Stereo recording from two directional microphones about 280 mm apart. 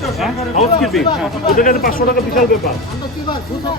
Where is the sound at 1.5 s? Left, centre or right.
Left.